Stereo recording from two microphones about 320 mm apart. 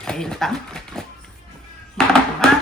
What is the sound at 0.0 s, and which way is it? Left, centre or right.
Speech, centre.